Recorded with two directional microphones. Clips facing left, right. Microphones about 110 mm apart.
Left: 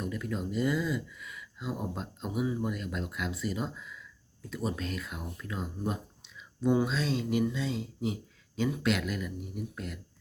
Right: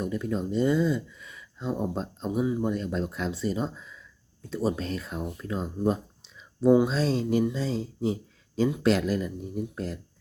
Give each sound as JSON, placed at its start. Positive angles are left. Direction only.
{"t": 0.0, "sound": "speech", "side_deg": -25}